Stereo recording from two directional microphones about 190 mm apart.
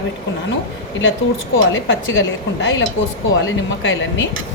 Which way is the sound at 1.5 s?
90° left.